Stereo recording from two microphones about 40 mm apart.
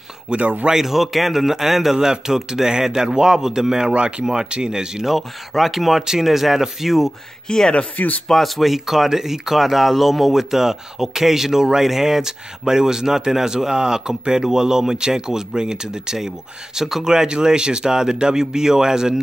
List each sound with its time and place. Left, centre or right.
0.4 s speech: right
0.7 s speech: centre
5.1 s speech: centre
7.4 s speech: centre
8.3 s speech: centre